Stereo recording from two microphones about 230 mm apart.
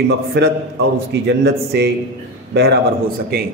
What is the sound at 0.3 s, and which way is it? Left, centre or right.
A man's voice, right.